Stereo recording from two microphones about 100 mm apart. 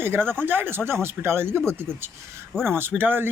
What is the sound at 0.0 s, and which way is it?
Speech, 20° right (ahead or behind).